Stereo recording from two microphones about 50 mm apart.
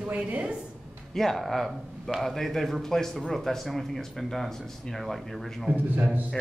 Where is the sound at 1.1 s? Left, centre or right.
Centre.